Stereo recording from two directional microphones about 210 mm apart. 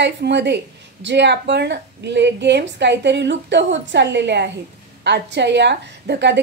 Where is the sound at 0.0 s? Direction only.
55° right (ahead or behind).